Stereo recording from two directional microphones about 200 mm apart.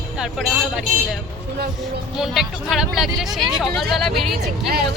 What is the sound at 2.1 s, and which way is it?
Speech, centre (ahead or behind).